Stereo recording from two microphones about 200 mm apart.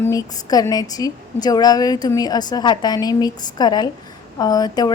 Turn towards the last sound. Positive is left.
turn(degrees=20)  # may be behind; listen again after turning